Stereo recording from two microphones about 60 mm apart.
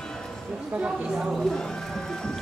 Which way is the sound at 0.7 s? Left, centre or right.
Centre.